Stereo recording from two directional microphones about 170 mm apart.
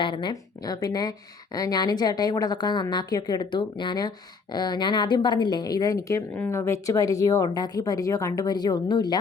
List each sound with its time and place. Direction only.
0.0 s a woman's voice: 25° left (ahead or behind)